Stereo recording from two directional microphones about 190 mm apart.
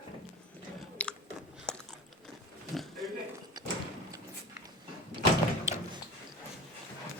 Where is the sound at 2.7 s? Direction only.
Centre (ahead or behind).